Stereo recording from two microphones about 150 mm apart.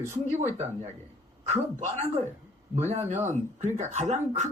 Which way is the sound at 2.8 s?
50° right (ahead or behind).